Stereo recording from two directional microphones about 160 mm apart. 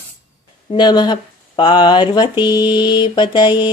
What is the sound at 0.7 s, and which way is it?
Speech, 30° left (ahead or behind).